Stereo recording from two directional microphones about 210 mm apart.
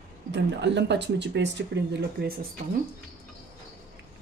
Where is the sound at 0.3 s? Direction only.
55° right (ahead or behind).